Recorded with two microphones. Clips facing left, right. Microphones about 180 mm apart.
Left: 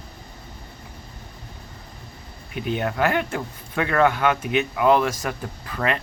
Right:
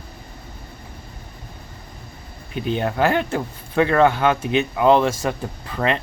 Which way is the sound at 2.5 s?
30° right (ahead or behind).